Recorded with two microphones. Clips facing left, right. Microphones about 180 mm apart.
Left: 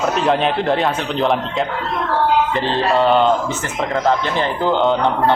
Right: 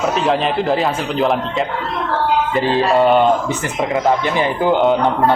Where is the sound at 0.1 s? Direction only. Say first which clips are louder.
Even; centre (ahead or behind).